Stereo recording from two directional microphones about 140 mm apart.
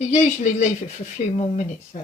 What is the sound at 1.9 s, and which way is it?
Speech, 60° left (ahead or behind).